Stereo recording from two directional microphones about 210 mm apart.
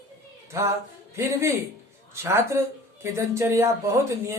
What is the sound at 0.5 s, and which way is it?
Speech, 15° right (ahead or behind).